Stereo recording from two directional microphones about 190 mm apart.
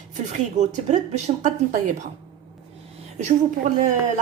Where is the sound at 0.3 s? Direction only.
40° right (ahead or behind).